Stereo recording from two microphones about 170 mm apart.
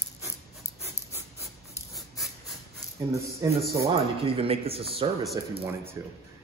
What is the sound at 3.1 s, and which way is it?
Speech, 20° right (ahead or behind).